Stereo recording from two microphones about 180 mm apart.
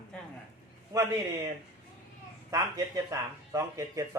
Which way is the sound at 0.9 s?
20° right (ahead or behind).